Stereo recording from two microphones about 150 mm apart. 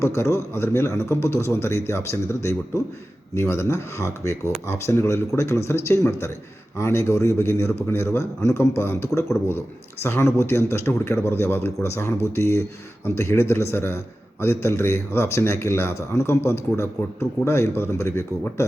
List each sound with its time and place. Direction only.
0.0 s a man's voice: 15° left (ahead or behind)